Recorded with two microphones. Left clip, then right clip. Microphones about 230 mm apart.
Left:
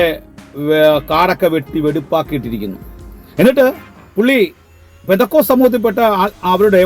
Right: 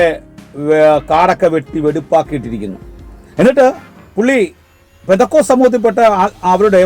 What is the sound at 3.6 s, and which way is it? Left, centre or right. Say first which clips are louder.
Music: right 2 dB; centre.